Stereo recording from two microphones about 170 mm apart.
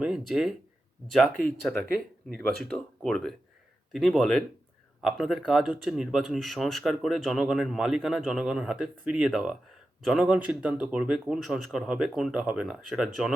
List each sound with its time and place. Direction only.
0.0 s speech: 5° right (ahead or behind)